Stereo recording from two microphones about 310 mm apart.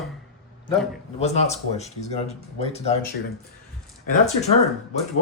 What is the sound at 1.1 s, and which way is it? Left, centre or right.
Speech, left.